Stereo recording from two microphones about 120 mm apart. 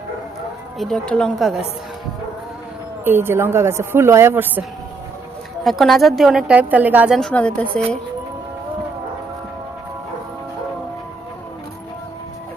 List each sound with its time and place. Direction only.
0.8 s a woman's voice: 5° left (ahead or behind)
3.0 s a woman's voice: 20° right (ahead or behind)
5.6 s a woman's voice: centre (ahead or behind)
7.2 s a woman's voice: 10° left (ahead or behind)